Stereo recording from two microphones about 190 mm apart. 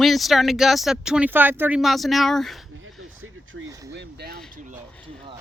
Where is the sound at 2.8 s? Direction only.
90° right.